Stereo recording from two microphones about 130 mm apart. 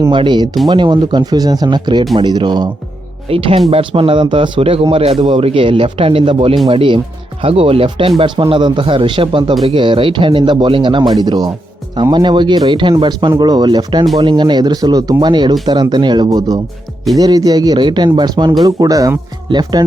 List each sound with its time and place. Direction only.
0.1 s speech: 35° right (ahead or behind)
3.2 s speech: 50° right (ahead or behind)